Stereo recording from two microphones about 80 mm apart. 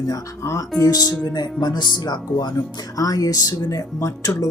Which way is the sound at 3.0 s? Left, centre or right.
Left.